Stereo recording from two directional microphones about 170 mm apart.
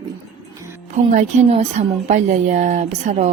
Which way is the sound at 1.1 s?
45° right (ahead or behind).